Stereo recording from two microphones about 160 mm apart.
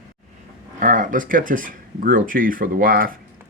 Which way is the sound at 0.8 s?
55° right (ahead or behind).